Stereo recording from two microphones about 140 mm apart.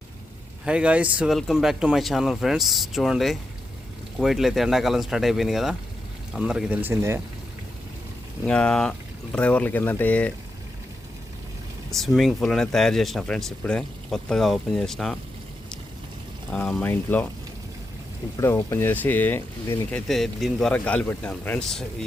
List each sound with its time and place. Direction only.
0.6 s speech: 5° right (ahead or behind)
8.4 s speech: 5° left (ahead or behind)
11.9 s speech: centre (ahead or behind)
16.5 s speech: 5° left (ahead or behind)
18.3 s speech: 20° left (ahead or behind)
19.9 s speech: centre (ahead or behind)